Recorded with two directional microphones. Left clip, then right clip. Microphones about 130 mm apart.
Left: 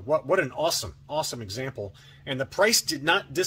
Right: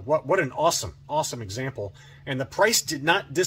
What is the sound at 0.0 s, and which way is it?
Speech, 25° left (ahead or behind).